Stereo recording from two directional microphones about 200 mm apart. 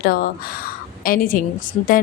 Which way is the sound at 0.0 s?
50° left (ahead or behind).